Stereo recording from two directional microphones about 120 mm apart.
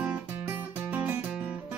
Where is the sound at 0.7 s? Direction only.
15° right (ahead or behind).